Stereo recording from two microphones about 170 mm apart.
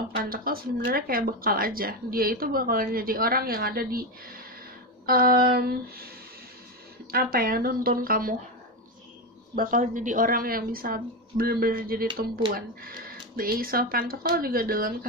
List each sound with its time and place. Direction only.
0.1 s speech: 60° right (ahead or behind)
7.1 s speech: 60° right (ahead or behind)
9.6 s speech: 50° right (ahead or behind)